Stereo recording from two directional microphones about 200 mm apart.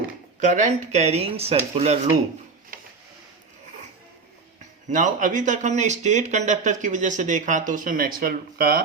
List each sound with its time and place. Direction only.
0.3 s speech: 40° right (ahead or behind)
2.7 s a sound: 45° right (ahead or behind)
4.9 s speech: 40° right (ahead or behind)